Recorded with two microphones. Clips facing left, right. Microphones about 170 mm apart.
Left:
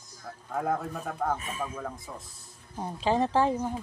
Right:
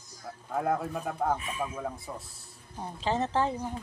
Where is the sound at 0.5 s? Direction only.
5° right (ahead or behind).